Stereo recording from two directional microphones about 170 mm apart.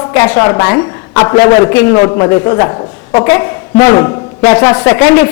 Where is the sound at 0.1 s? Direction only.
15° left (ahead or behind).